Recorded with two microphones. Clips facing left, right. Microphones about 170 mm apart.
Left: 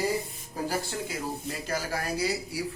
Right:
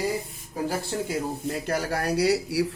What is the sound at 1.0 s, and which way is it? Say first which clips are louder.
Speech: right 5 dB; 55° right (ahead or behind).